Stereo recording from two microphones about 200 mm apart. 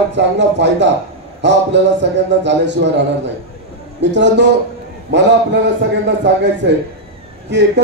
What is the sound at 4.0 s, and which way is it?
Speech, 60° right (ahead or behind).